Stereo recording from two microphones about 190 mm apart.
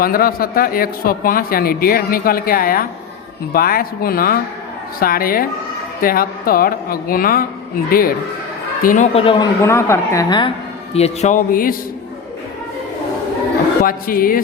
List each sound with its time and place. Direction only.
0.0 s a man's voice: 50° left (ahead or behind)
9.1 s a woman's voice: 25° left (ahead or behind)
10.9 s a man's voice: 35° left (ahead or behind)
13.8 s a man's voice: 50° left (ahead or behind)